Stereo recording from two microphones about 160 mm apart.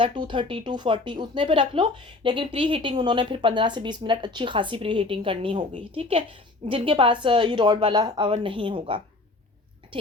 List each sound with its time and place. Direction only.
0.0 s a woman's voice: 30° right (ahead or behind)